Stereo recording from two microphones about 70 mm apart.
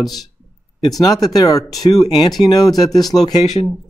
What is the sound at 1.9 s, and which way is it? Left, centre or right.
Speech, left.